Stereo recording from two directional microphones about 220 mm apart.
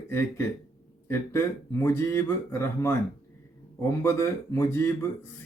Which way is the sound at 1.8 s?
10° left (ahead or behind).